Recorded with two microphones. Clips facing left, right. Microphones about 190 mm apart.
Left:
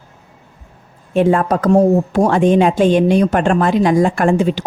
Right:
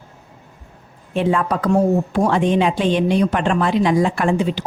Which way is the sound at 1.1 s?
45° left (ahead or behind).